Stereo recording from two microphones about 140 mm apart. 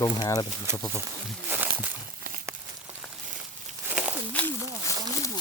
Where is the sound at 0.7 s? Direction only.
20° right (ahead or behind).